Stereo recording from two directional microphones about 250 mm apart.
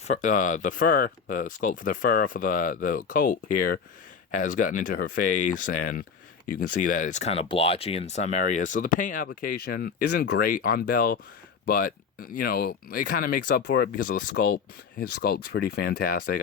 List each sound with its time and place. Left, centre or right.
0.1 s speech: left